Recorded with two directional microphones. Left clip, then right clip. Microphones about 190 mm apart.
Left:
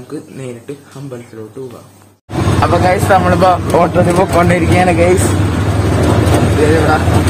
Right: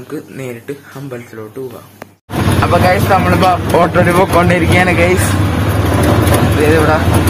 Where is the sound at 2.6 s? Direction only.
25° left (ahead or behind).